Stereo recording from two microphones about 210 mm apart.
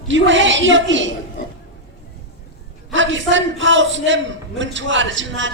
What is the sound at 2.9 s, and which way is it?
A man's voice, 60° right (ahead or behind).